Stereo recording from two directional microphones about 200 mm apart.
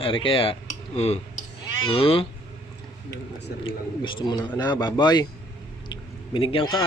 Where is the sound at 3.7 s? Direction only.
25° left (ahead or behind).